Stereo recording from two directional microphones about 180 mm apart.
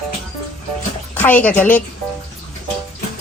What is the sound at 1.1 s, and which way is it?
Speech, 10° left (ahead or behind).